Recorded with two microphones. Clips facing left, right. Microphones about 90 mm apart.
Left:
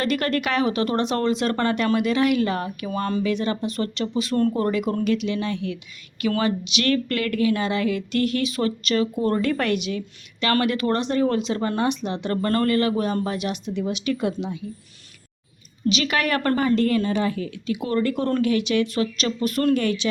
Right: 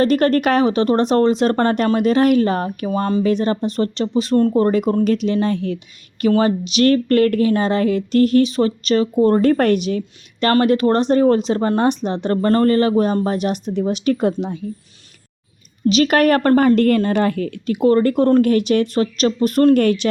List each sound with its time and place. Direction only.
0.0 s speech: 40° right (ahead or behind)
3.2 s speech: 40° right (ahead or behind)
15.9 s a woman's voice: 45° right (ahead or behind)
16.6 s a woman's voice: 55° right (ahead or behind)